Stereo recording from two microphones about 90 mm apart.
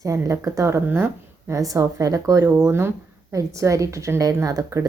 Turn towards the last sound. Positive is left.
turn(degrees=-40)  # may be behind; listen again after turning